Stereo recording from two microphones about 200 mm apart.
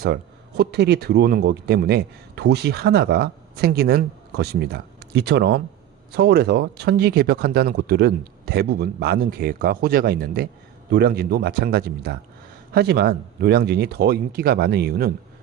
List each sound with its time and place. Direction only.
0.0 s speech: 55° right (ahead or behind)